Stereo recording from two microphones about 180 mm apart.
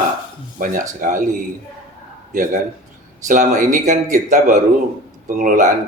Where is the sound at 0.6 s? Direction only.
50° right (ahead or behind).